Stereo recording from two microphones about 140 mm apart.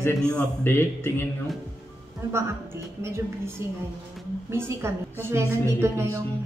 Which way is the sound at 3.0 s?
20° right (ahead or behind).